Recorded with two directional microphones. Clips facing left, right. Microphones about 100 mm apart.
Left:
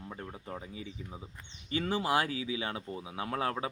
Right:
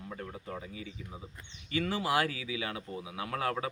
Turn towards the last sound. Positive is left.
turn(degrees=25)  # may be behind; listen again after turning